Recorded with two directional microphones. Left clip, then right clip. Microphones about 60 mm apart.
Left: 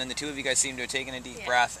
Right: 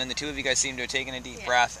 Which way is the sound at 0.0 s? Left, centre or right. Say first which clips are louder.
Right 2 dB; right.